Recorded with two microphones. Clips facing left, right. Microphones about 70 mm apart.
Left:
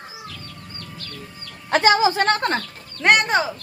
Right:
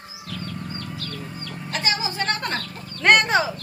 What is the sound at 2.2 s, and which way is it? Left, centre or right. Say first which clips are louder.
Speech: left 6 dB; left.